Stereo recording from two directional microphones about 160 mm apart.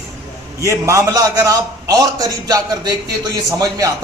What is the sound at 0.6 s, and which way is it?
A man's voice, 20° right (ahead or behind).